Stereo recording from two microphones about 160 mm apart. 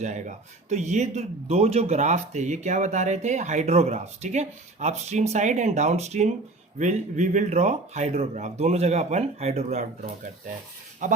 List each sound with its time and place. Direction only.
0.0 s speech: 50° right (ahead or behind)
11.0 s speech: 50° right (ahead or behind)